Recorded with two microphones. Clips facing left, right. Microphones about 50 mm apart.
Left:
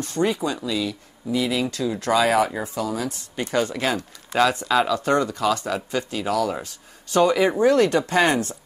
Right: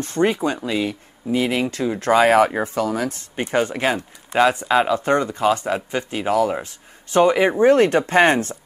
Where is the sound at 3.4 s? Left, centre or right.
Right.